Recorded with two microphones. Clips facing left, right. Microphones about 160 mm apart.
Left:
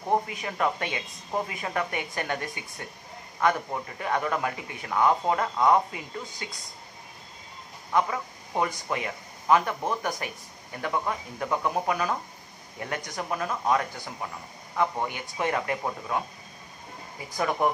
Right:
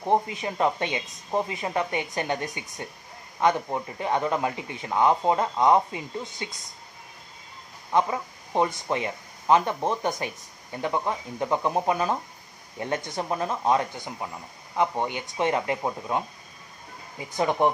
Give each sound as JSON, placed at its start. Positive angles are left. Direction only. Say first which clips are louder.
{"t": 0.0, "sound": "speech", "louder": "right 3 dB", "side_deg": -25}
{"t": 7.9, "sound": "speech", "louder": "right 2 dB", "side_deg": -25}
{"t": 17.4, "sound": "speech", "louder": "right 3 dB", "side_deg": -25}